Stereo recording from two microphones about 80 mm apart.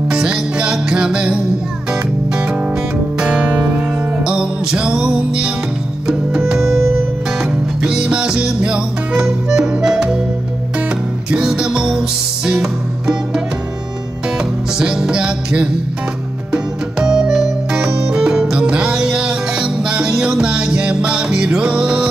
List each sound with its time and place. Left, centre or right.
0.1 s music: centre
3.2 s music: centre
11.2 s music: centre
14.8 s music: centre